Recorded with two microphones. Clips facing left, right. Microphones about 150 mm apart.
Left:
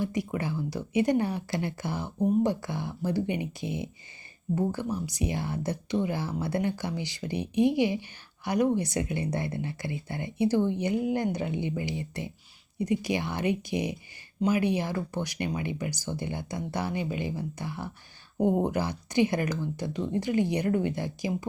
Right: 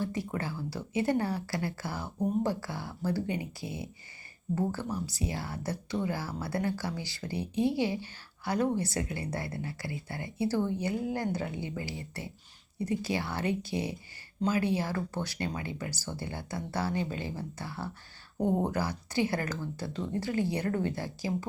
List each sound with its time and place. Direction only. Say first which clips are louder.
0.0 s speech: left 3 dB; 15° left (ahead or behind)